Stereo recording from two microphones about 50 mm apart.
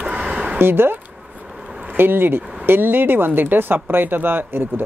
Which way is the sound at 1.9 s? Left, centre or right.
Right.